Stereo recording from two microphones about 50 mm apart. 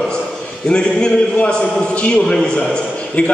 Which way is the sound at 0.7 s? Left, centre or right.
Centre.